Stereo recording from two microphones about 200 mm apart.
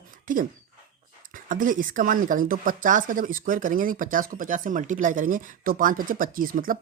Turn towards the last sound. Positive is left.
turn(degrees=-45)  # may be behind; listen again after turning